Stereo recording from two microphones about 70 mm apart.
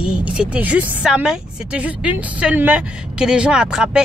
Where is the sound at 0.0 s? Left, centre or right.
Centre.